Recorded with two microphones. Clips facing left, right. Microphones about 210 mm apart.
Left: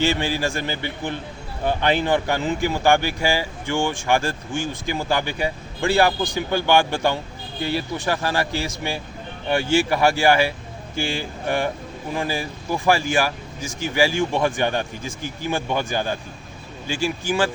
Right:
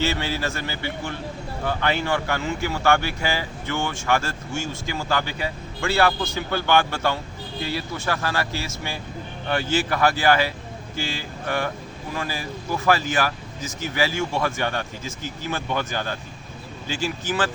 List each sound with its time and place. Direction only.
0.0 s speech: 15° left (ahead or behind)